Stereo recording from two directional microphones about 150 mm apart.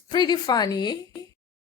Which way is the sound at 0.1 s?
30° left (ahead or behind).